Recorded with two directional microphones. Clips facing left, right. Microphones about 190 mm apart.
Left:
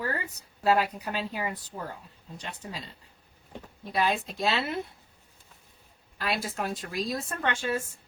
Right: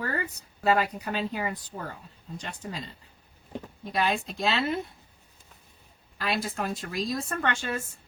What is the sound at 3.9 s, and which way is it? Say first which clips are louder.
Speech: even; 5° left (ahead or behind).